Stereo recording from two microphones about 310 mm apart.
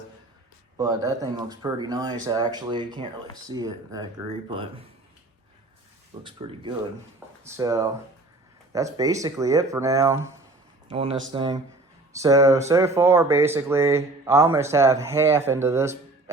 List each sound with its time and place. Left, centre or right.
0.8 s speech: centre
6.2 s speech: centre